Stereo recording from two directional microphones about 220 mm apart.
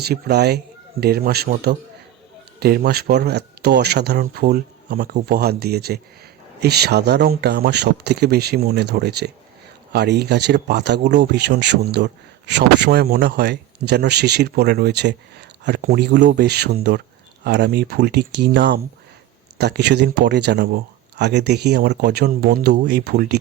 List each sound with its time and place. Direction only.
0.0 s speech: 45° right (ahead or behind)